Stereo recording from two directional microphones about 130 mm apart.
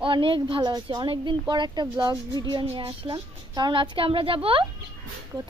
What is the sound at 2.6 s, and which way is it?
A woman's voice, 45° right (ahead or behind).